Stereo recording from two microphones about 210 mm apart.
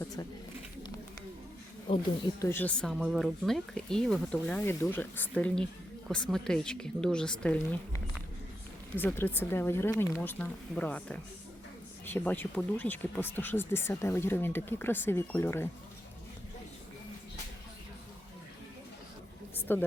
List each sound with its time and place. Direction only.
0.0 s a sound: 15° left (ahead or behind)
1.9 s speech: 25° left (ahead or behind)
2.4 s speech: 10° left (ahead or behind)
19.7 s speech: 10° left (ahead or behind)